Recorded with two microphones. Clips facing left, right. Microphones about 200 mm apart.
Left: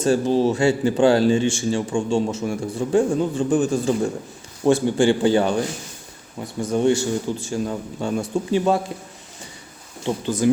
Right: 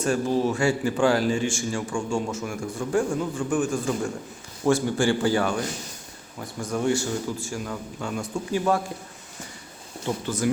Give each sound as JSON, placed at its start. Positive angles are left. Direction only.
{"t": 0.0, "sound": "speech", "side_deg": 30}
{"t": 6.7, "sound": "speech", "side_deg": 25}
{"t": 10.2, "sound": "speech", "side_deg": 20}